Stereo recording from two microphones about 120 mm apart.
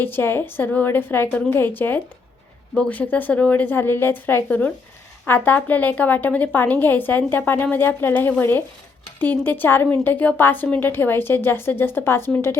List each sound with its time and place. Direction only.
0.0 s a woman's voice: 20° left (ahead or behind)